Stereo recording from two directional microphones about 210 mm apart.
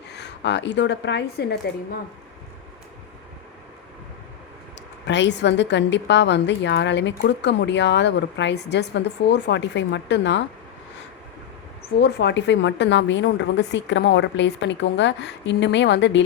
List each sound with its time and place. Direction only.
0.1 s speech: 55° left (ahead or behind)
5.0 s a woman's voice: 55° left (ahead or behind)
11.9 s a woman's voice: 50° left (ahead or behind)